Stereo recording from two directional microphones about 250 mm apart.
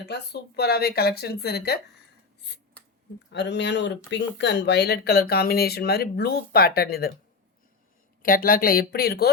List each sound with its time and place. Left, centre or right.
0.0 s speech: left
3.3 s speech: left
8.2 s speech: left